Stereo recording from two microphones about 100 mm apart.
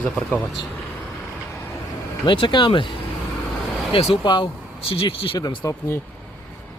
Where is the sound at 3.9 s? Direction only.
85° left.